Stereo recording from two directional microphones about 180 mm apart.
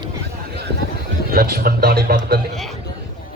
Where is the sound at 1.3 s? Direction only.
55° right (ahead or behind).